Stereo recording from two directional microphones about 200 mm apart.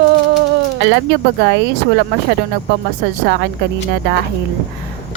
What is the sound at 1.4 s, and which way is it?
Speech, 60° right (ahead or behind).